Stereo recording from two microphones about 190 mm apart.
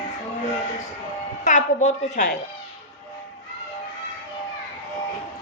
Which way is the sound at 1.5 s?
40° left (ahead or behind).